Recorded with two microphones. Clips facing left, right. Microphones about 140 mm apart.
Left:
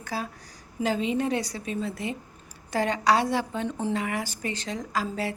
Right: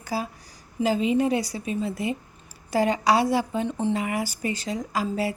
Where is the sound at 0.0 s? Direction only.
10° right (ahead or behind).